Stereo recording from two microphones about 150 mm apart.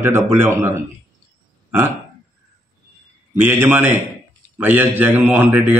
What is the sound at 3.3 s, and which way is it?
A man's voice, 15° right (ahead or behind).